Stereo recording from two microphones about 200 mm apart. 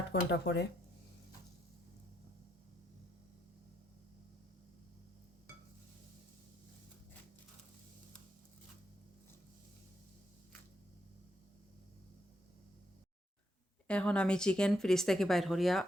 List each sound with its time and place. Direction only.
0.1 s speech: 60° left (ahead or behind)
13.8 s speech: 5° left (ahead or behind)